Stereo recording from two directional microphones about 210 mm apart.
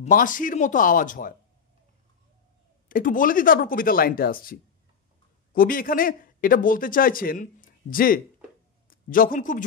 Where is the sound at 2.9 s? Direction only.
40° left (ahead or behind).